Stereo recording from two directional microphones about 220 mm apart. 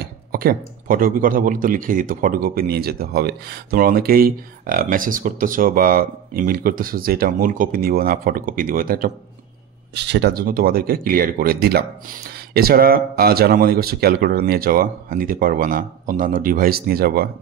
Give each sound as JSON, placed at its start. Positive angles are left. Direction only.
{"t": 0.0, "sound": "speech", "side_deg": -40}
{"t": 9.9, "sound": "speech", "side_deg": -50}